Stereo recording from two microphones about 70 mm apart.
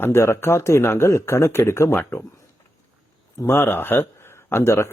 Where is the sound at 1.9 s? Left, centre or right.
Left.